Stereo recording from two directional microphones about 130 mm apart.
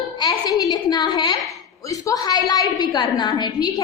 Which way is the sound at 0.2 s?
35° left (ahead or behind).